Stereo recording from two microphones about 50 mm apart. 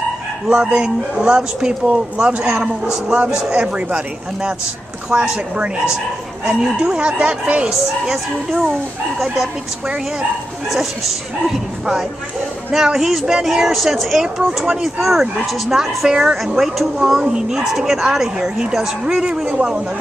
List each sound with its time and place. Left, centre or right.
0.5 s a man's voice: centre
7.7 s a man's voice: centre
10.7 s a man's voice: centre; by 19.8 s right